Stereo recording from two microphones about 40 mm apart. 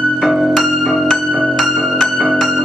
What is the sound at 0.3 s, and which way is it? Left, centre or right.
Music, centre.